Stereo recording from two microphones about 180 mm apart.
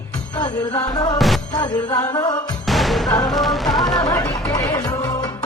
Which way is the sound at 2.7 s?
Centre (ahead or behind).